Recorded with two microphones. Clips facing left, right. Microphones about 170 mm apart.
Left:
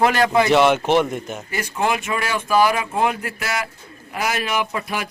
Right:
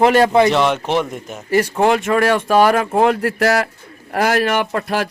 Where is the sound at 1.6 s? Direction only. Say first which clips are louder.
Right 7 dB; 55° right (ahead or behind).